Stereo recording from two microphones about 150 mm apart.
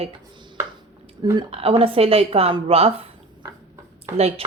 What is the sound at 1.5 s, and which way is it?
A woman's voice, 40° right (ahead or behind).